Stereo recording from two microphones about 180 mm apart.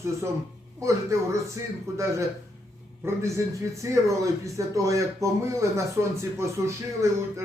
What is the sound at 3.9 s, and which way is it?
Speech, 15° right (ahead or behind).